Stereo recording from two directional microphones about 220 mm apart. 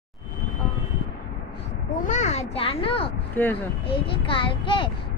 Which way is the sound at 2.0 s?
35° left (ahead or behind).